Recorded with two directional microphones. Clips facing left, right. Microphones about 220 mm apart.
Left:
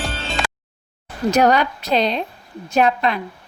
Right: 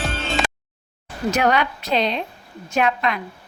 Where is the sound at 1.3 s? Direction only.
40° left (ahead or behind).